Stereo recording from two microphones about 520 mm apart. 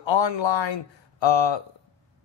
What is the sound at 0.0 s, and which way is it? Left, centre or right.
Speech, left.